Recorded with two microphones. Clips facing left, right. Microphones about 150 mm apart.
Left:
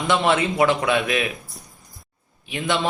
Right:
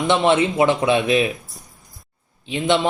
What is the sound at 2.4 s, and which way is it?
Speech, 25° right (ahead or behind).